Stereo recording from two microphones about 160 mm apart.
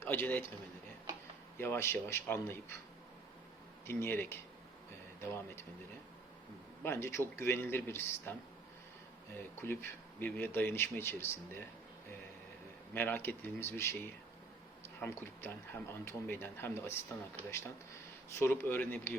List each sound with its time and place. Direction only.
0.0 s a man's voice: 15° left (ahead or behind)
1.5 s speech: 15° left (ahead or behind)
3.8 s speech: 15° left (ahead or behind)
6.8 s speech: 15° left (ahead or behind)
12.9 s speech: 10° left (ahead or behind)